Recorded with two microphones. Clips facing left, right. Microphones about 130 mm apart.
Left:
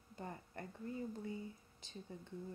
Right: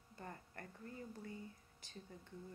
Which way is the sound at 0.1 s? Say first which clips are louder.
Left 4 dB; 20° left (ahead or behind).